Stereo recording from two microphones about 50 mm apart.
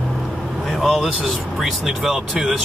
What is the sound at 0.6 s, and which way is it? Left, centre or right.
Vehicle, centre.